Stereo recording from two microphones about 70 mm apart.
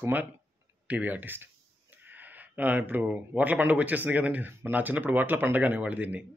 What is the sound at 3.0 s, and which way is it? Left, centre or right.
Speech, right.